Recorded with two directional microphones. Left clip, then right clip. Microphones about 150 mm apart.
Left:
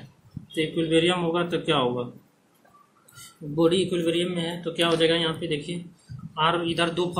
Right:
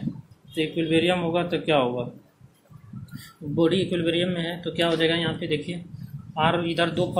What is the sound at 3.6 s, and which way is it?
A man's voice, 30° right (ahead or behind).